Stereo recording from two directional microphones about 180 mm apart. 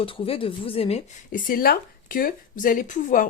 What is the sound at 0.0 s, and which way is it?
Speech, 30° left (ahead or behind).